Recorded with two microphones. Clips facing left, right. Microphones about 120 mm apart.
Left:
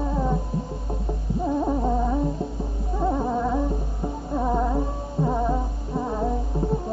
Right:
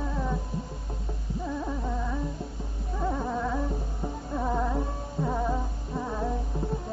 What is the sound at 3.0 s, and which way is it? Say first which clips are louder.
Music: left 6 dB; 25° left (ahead or behind).